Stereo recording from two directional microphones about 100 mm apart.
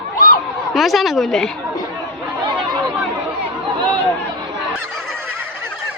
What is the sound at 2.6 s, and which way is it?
Chatter, 45° right (ahead or behind).